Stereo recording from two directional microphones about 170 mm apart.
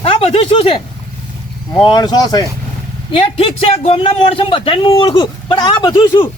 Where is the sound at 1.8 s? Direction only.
25° left (ahead or behind).